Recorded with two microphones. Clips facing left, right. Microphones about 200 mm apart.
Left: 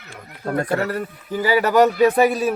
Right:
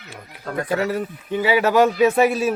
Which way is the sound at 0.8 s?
Centre (ahead or behind).